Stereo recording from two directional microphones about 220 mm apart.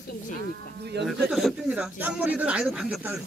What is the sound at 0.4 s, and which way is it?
Speech, 50° right (ahead or behind).